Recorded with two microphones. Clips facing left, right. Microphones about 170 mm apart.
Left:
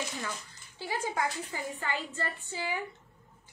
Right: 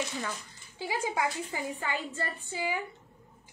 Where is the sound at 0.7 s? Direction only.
15° right (ahead or behind).